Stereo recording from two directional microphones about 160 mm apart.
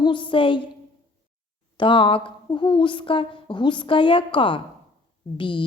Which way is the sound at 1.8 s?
30° left (ahead or behind).